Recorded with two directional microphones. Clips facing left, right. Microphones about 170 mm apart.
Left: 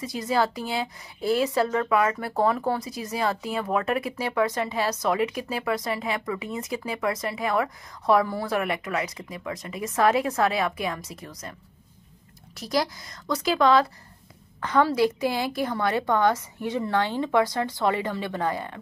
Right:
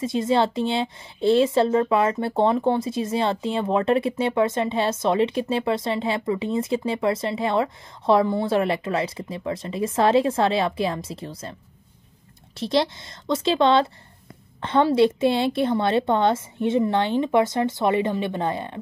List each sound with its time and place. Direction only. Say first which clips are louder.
0.0 s a woman's voice: right 4 dB; 25° right (ahead or behind)
12.5 s a woman's voice: right 4 dB; 25° right (ahead or behind)